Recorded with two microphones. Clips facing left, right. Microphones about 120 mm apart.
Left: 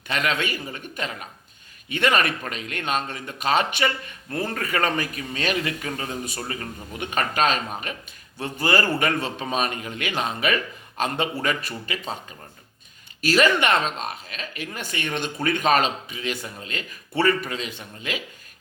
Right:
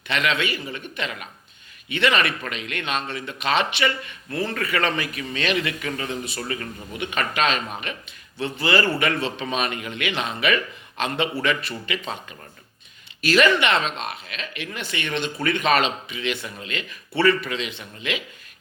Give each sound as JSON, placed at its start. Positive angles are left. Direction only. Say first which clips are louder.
{"t": 0.1, "sound": "a man's voice", "louder": "right 1 dB", "side_deg": 40}
{"t": 13.2, "sound": "speech", "louder": "right 1 dB", "side_deg": 40}